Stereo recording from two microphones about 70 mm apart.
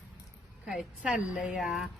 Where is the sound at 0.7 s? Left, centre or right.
Centre.